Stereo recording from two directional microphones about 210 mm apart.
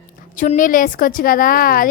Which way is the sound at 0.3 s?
40° left (ahead or behind).